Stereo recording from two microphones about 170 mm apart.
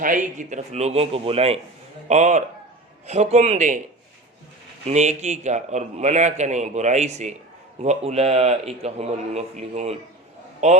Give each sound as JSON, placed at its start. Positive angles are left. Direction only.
{"t": 0.0, "sound": "a man's voice", "side_deg": -50}
{"t": 4.9, "sound": "a man's voice", "side_deg": -40}